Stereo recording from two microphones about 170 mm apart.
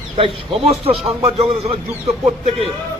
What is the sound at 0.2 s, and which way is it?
Speech, 35° right (ahead or behind).